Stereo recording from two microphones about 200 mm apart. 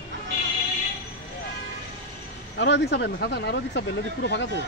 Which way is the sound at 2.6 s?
60° left (ahead or behind).